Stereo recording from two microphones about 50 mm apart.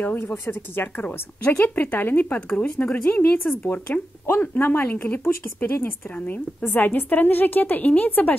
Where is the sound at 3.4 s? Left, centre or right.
Left.